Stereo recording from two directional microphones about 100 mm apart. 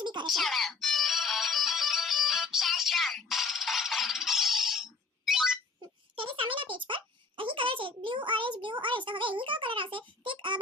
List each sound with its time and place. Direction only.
0.0 s music: 50° right (ahead or behind)
0.3 s music: centre (ahead or behind)
6.1 s a sound: 60° right (ahead or behind)